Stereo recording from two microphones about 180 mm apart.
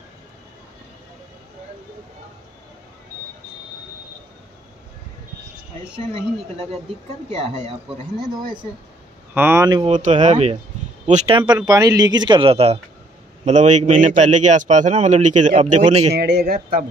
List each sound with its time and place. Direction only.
7.3 s a man's voice: 40° right (ahead or behind)
9.3 s speech: 10° right (ahead or behind)
9.8 s a man's voice: 40° right (ahead or behind)
11.3 s a man's voice: 25° right (ahead or behind)
16.2 s speech: 65° right (ahead or behind)